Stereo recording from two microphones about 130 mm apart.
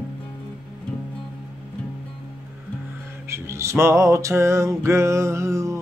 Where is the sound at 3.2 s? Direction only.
20° right (ahead or behind).